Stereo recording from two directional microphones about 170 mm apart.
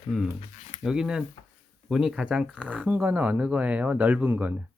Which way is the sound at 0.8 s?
5° right (ahead or behind).